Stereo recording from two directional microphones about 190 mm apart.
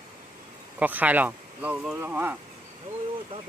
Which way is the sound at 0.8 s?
10° right (ahead or behind).